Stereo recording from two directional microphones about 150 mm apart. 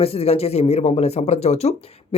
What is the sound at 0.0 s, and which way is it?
Speech, 40° left (ahead or behind).